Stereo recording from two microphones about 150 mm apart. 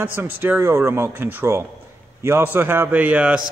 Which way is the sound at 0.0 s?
15° right (ahead or behind).